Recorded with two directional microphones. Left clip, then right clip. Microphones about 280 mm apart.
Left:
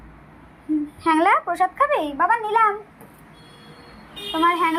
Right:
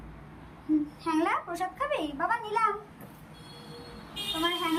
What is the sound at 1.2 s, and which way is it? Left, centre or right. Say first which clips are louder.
A woman's voice: left 12 dB; left.